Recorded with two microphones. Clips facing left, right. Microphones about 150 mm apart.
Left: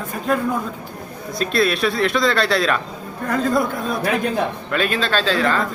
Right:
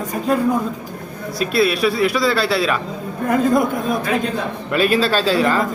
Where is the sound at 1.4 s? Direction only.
5° right (ahead or behind).